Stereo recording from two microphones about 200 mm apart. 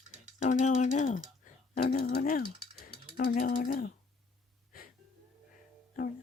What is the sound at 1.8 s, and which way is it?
Mechanisms, 45° left (ahead or behind).